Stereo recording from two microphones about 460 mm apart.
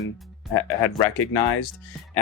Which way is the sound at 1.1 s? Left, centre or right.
Left.